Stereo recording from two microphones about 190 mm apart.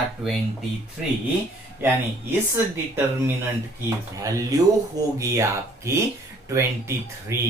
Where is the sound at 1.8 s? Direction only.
10° right (ahead or behind).